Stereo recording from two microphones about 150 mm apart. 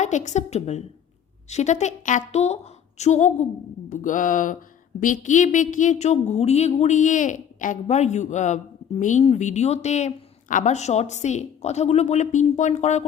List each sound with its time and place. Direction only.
0.0 s a woman's voice: 55° left (ahead or behind)